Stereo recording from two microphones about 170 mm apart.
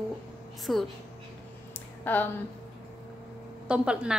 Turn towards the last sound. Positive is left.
turn(degrees=-5)  # may be behind; listen again after turning